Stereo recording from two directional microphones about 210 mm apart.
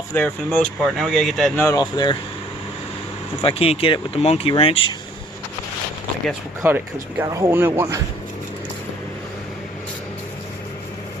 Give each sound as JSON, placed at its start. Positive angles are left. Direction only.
{"t": 0.1, "sound": "speech", "side_deg": 10}
{"t": 1.6, "sound": "speech", "side_deg": 20}
{"t": 3.4, "sound": "speech", "side_deg": 30}
{"t": 6.6, "sound": "speech", "side_deg": -10}